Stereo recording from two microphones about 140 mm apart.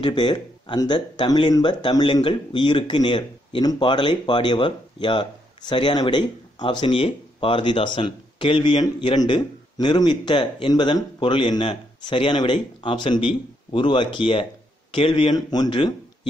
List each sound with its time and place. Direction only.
0.0 s speech: 30° left (ahead or behind)